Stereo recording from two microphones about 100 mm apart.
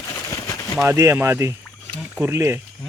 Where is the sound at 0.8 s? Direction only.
30° right (ahead or behind).